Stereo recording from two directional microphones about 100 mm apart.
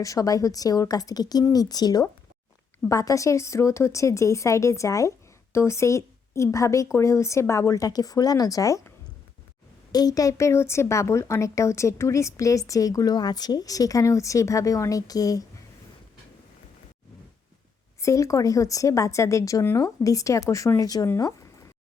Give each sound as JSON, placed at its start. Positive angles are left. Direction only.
{"t": 0.0, "sound": "a woman's voice", "side_deg": 35}
{"t": 9.9, "sound": "speech", "side_deg": 40}
{"t": 18.0, "sound": "speech", "side_deg": 30}